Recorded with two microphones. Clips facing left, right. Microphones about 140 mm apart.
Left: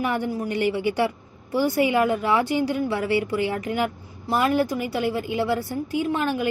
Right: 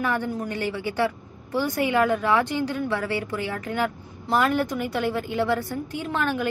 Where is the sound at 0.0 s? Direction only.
15° left (ahead or behind).